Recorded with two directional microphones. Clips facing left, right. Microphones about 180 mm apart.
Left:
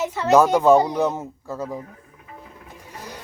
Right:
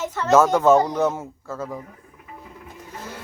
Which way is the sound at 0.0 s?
10° left (ahead or behind).